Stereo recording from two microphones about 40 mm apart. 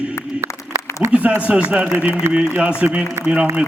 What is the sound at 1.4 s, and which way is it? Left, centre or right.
A man's voice, right.